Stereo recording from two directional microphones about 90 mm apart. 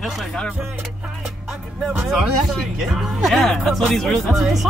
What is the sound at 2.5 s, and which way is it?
Speech, centre (ahead or behind).